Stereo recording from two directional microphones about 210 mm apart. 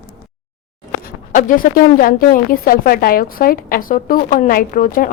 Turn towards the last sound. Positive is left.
turn(degrees=40)  # may be behind; listen again after turning